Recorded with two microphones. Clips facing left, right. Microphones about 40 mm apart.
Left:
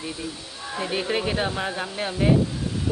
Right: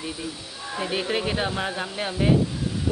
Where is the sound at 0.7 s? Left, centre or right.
Centre.